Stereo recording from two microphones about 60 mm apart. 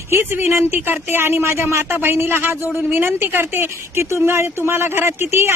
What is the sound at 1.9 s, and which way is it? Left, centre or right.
A woman's voice, right.